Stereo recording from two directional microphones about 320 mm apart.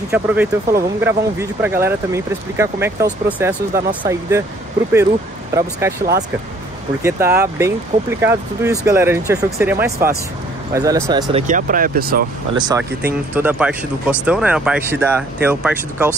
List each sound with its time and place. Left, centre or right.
0.1 s speech: centre
5.5 s speech: centre
11.4 s speech: right
12.5 s speech: centre